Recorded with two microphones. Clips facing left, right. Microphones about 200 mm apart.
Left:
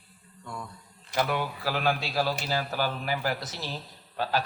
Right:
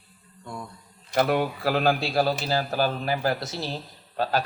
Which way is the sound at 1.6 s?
35° right (ahead or behind).